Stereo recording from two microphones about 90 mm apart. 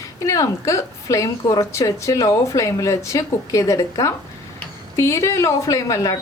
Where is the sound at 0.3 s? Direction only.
35° left (ahead or behind).